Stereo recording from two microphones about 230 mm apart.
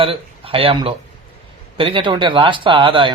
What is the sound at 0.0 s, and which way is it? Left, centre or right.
Speech, right.